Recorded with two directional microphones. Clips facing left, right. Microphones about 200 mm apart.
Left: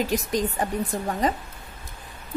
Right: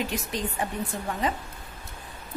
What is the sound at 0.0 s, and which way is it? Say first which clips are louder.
A woman's voice: left 6 dB; 40° left (ahead or behind).